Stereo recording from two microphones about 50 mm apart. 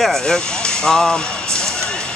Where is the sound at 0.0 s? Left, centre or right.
Centre.